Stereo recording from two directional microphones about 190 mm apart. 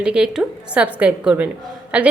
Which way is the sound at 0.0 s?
5° right (ahead or behind).